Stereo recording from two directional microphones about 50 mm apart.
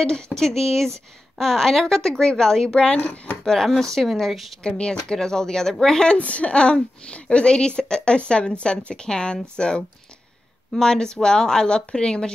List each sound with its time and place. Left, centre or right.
0.0 s a woman's voice: centre
4.6 s a woman's voice: centre
6.1 s a woman's voice: left